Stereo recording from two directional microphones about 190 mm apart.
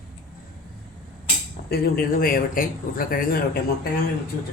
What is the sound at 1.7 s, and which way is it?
Speech, 50° left (ahead or behind).